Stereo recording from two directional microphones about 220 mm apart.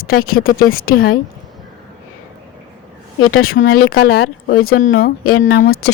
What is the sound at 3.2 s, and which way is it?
Speech, 70° left (ahead or behind).